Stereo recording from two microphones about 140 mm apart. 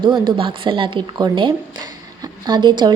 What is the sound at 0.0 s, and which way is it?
Speech, 35° right (ahead or behind).